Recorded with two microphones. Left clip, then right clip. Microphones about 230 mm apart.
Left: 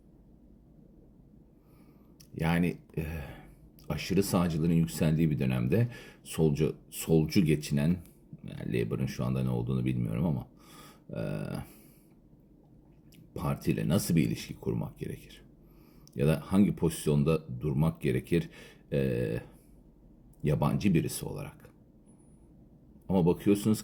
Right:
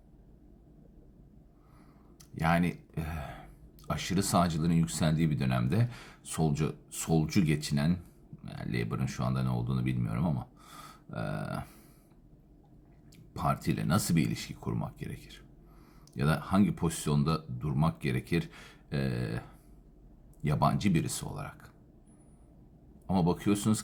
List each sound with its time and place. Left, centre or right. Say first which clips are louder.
2.3 s speech: right 2 dB; centre
13.3 s speech: right 2 dB; centre
23.0 s speech: left 3 dB; centre